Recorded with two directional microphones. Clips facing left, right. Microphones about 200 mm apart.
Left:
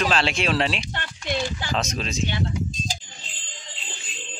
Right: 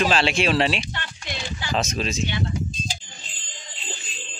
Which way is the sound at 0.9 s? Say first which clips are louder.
Left 5 dB; 50° left (ahead or behind).